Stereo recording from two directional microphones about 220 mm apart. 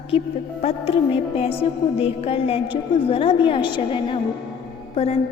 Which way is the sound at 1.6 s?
25° left (ahead or behind).